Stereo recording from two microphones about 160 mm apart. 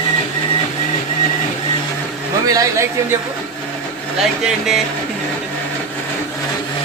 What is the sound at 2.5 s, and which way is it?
Speech, 20° right (ahead or behind).